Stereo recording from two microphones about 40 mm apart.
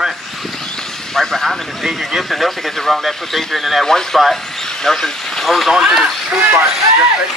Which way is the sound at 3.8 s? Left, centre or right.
Centre.